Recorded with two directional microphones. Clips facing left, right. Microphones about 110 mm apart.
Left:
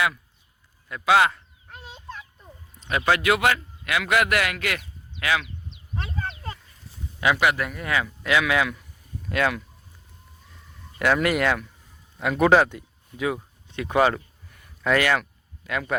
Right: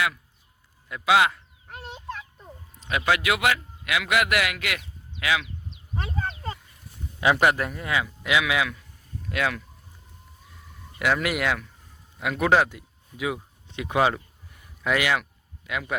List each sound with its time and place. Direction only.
0.9 s a sound: 10° right (ahead or behind)
3.1 s a man's voice: 5° right (ahead or behind)
5.9 s a sound: 10° right (ahead or behind)
7.3 s speech: 35° right (ahead or behind); by 8.0 s 20° right (ahead or behind)
8.0 s a man's voice: 10° right (ahead or behind)
11.0 s speech: 5° right (ahead or behind)